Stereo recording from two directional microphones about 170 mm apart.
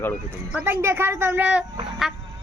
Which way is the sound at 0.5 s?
10° right (ahead or behind).